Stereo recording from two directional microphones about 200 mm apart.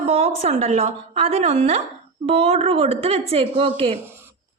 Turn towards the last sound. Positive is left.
turn(degrees=-10)  # may be behind; listen again after turning